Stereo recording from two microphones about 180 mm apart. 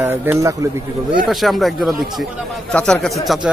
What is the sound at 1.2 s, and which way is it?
A man's voice, centre (ahead or behind).